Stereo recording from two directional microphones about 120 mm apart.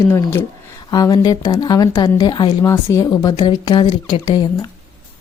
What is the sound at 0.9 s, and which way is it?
Speech, 35° left (ahead or behind).